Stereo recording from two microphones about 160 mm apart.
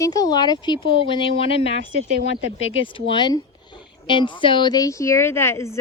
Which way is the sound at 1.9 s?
60° right (ahead or behind).